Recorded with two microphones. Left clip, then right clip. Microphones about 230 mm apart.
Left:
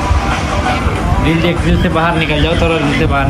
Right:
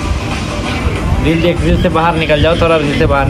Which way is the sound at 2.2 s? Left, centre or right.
Centre.